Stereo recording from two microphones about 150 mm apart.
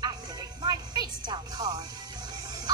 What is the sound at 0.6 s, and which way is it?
Music, 30° right (ahead or behind).